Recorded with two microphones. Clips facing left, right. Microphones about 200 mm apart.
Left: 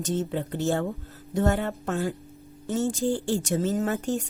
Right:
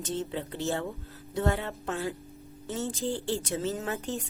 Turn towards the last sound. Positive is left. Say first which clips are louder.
# left 6 dB
turn(degrees=45)  # may be behind; listen again after turning